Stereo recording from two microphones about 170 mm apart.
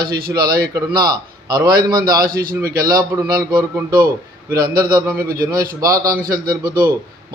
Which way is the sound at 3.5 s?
20° right (ahead or behind).